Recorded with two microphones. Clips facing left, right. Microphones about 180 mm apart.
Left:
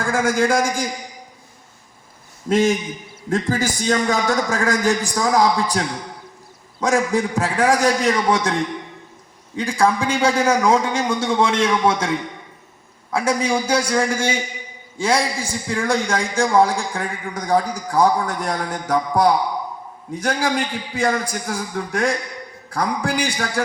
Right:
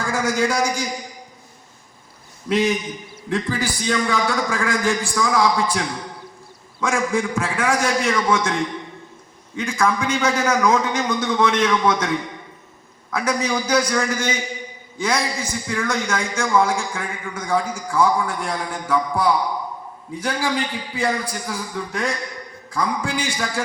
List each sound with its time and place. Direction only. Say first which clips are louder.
0.0 s a man's voice: left 2 dB; 50° left (ahead or behind)
2.5 s a man's voice: left 2 dB; 45° left (ahead or behind)
9.6 s a man's voice: left 2 dB; 30° left (ahead or behind); by 23.1 s 55° left (ahead or behind)